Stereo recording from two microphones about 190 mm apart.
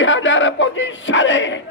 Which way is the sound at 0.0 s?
80° left.